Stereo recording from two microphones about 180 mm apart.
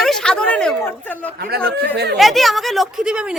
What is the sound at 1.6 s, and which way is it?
Speech, 65° right (ahead or behind).